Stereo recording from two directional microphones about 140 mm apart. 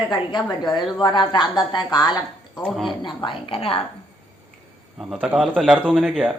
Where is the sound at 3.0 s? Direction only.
35° left (ahead or behind).